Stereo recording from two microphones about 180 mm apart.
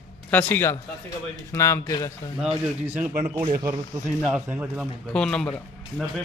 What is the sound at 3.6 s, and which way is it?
Speech, 20° right (ahead or behind).